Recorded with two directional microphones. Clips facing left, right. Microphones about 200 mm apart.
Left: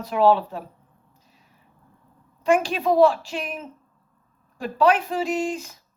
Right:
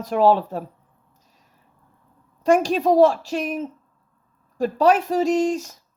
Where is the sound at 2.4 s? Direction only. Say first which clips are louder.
Right 3 dB; 40° right (ahead or behind).